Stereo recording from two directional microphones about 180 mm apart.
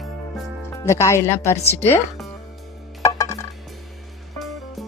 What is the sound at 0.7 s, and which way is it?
Speech, 15° left (ahead or behind).